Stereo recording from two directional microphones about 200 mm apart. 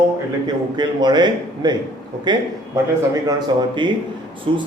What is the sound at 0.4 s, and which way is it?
A man's voice, 20° right (ahead or behind).